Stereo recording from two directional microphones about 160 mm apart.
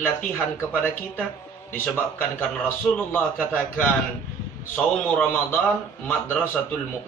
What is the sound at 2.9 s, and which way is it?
Speech, 10° left (ahead or behind).